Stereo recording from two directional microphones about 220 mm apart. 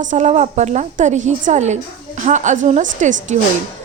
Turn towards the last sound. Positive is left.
turn(degrees=-35)  # may be behind; listen again after turning